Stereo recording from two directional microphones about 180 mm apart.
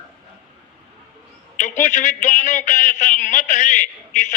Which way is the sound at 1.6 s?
45° left (ahead or behind).